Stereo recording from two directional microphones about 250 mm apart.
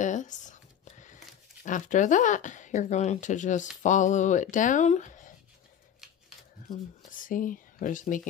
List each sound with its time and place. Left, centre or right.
0.0 s a sound: left
1.0 s speech: left
7.1 s speech: left